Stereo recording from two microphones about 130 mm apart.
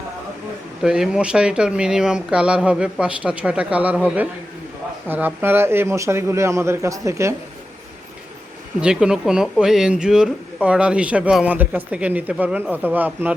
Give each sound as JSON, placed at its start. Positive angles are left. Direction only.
{"t": 0.8, "sound": "a man's voice", "side_deg": -5}
{"t": 8.8, "sound": "speech", "side_deg": -5}